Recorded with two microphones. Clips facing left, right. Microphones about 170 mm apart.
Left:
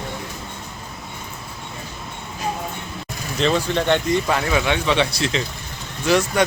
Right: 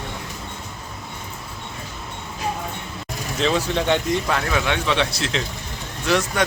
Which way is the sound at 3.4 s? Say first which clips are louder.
Left 1 dB; 5° right (ahead or behind).